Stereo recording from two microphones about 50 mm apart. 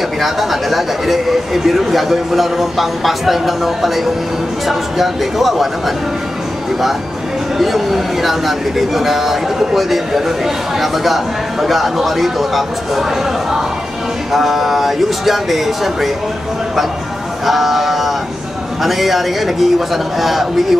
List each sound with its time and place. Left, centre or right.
0.2 s speech: centre
7.5 s speech: centre
14.3 s speech: centre
17.5 s speech: centre